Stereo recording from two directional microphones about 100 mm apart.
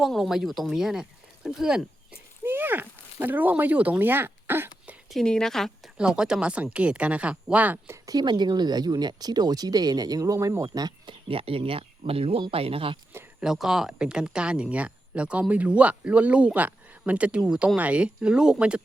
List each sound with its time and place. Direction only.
0.0 s speech: centre (ahead or behind)
2.4 s speech: 20° right (ahead or behind)
5.0 s speech: 5° left (ahead or behind)
6.0 s speech: 5° right (ahead or behind)
8.0 s speech: 45° right (ahead or behind)
11.3 s speech: 70° right (ahead or behind)
13.4 s speech: 5° right (ahead or behind)